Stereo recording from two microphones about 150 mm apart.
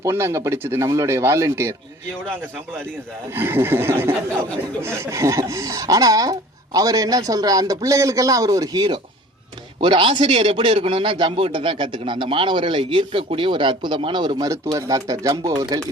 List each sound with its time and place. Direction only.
0.0 s speech: 20° right (ahead or behind)
3.3 s a man's voice: 15° right (ahead or behind)